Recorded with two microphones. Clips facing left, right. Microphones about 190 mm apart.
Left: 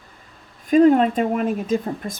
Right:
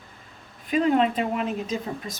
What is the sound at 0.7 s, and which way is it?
Speech, 45° left (ahead or behind).